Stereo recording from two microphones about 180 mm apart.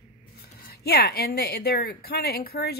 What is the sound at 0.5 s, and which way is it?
A woman's voice, 60° left (ahead or behind).